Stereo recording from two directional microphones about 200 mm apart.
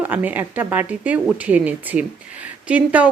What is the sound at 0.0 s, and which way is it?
A woman's voice, 10° right (ahead or behind).